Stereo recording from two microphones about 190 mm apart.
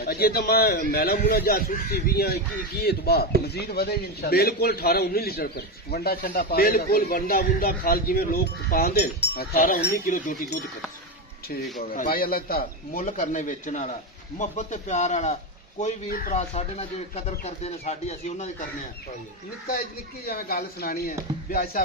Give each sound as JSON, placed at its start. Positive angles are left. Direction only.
{"t": 0.0, "sound": "a man's voice", "side_deg": 55}
{"t": 11.8, "sound": "a man's voice", "side_deg": 50}
{"t": 16.3, "sound": "speech", "side_deg": 35}
{"t": 20.2, "sound": "a man's voice", "side_deg": 50}